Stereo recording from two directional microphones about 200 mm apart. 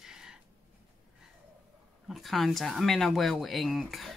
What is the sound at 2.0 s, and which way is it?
Speech, centre (ahead or behind).